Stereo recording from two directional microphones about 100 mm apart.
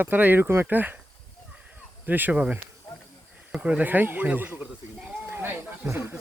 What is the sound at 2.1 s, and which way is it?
Speech, 20° right (ahead or behind).